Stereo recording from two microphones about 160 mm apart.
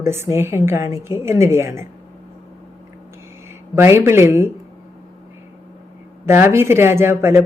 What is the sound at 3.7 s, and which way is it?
Speech, 15° right (ahead or behind).